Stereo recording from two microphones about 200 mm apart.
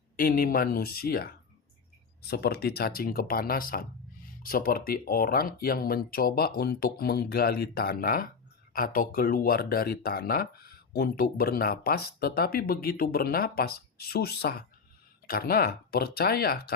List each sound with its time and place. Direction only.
0.2 s speech: 45° left (ahead or behind)